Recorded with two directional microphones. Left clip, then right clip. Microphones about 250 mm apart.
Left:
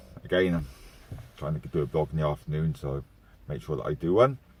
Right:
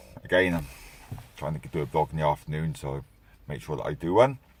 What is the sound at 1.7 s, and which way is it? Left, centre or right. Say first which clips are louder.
Speech: right 1 dB; centre.